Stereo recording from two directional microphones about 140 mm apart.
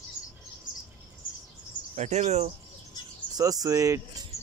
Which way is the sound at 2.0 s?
55° right (ahead or behind).